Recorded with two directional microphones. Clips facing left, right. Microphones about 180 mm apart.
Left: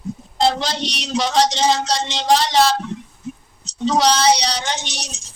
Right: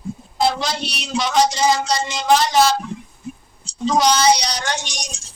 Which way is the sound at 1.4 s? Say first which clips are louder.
Right 1 dB; 75° left (ahead or behind).